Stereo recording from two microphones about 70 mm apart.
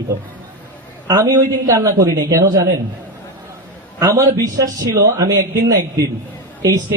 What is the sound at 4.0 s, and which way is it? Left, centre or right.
A man's voice, right.